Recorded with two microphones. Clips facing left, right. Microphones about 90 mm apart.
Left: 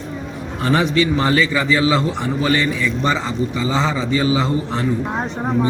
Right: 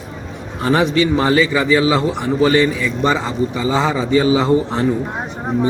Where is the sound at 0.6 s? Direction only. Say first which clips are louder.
Right 2 dB; 25° right (ahead or behind).